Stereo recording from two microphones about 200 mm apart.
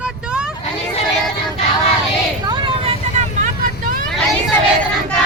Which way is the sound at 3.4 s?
45° right (ahead or behind).